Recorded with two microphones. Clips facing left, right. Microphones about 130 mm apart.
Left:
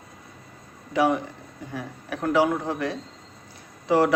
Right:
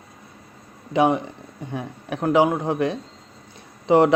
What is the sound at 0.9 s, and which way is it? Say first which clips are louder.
A man's voice: right 3 dB; 20° right (ahead or behind).